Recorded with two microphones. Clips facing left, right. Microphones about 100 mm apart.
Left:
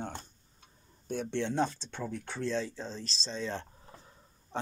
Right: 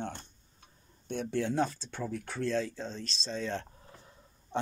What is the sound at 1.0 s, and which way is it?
Speech, centre (ahead or behind).